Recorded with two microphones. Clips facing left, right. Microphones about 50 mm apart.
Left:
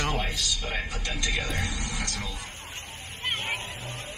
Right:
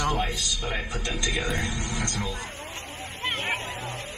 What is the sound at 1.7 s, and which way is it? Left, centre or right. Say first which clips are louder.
Speech: right 3 dB; right.